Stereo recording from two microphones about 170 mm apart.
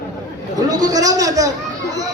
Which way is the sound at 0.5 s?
20° right (ahead or behind).